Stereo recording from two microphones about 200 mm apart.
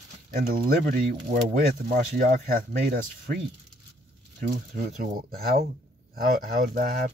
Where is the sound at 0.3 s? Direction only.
45° right (ahead or behind).